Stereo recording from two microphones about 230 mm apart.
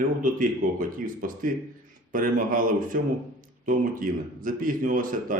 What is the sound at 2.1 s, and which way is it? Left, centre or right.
Speech, right.